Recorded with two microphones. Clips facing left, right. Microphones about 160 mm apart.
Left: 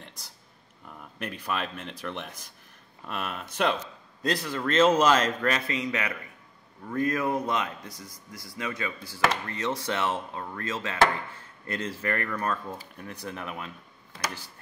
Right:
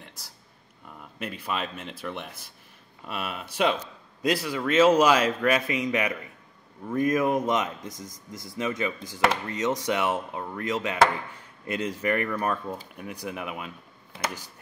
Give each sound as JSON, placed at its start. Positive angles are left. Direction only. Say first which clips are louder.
{"t": 1.2, "sound": "speech", "louder": "right 1 dB", "side_deg": -10}